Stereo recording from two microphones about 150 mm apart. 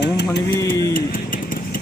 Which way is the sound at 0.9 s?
65° left (ahead or behind).